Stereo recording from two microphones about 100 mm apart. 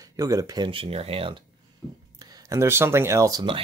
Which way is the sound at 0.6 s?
65° right (ahead or behind).